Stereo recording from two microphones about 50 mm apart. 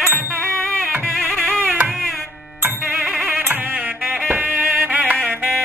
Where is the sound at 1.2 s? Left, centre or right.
Centre.